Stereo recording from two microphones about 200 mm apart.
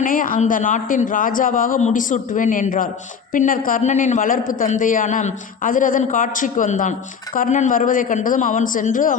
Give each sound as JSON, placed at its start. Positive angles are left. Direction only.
{"t": 0.0, "sound": "a man's voice", "side_deg": 45}